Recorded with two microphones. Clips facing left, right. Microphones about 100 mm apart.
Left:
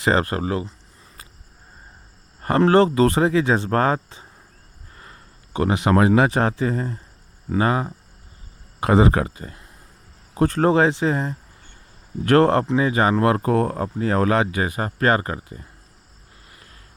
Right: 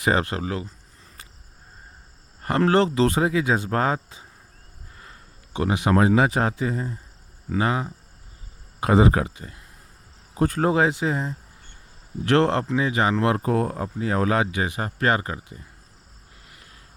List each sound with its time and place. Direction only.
0.0 s speech: 60° left (ahead or behind)
0.3 s speech: 40° left (ahead or behind)
2.4 s speech: 35° left (ahead or behind); by 4.3 s 55° left (ahead or behind)
5.5 s speech: 55° left (ahead or behind)
7.5 s speech: 45° left (ahead or behind)
8.8 s speech: 60° left (ahead or behind)
9.3 s speech: 35° left (ahead or behind)
10.3 s speech: 70° left (ahead or behind)
11.0 s speech: 80° left
12.2 s speech: 45° left (ahead or behind)